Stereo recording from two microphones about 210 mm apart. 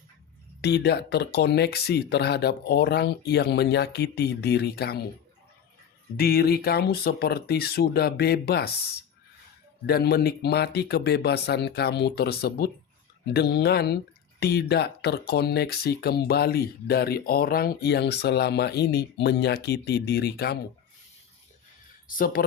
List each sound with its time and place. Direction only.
0.6 s speech: 50° left (ahead or behind)
6.1 s speech: 45° left (ahead or behind)
9.8 s speech: 50° left (ahead or behind)
22.0 s speech: 45° left (ahead or behind)